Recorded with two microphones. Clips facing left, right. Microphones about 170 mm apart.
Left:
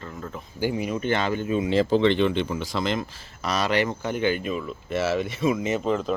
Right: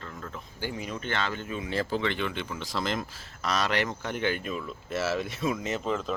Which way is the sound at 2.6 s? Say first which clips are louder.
Left 5 dB; centre (ahead or behind).